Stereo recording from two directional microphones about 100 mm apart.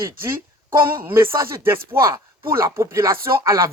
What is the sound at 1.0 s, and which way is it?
Speech, 25° right (ahead or behind).